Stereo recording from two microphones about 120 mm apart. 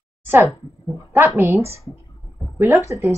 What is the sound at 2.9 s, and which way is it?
Speech, 25° right (ahead or behind).